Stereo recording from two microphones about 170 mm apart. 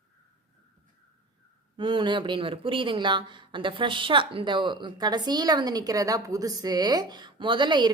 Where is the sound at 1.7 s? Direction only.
25° right (ahead or behind).